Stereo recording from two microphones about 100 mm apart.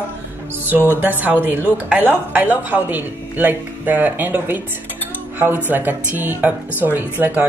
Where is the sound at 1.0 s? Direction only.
15° right (ahead or behind).